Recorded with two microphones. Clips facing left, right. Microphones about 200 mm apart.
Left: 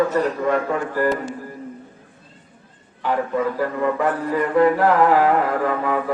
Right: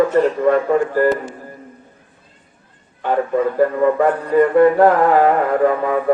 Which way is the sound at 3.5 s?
50° right (ahead or behind).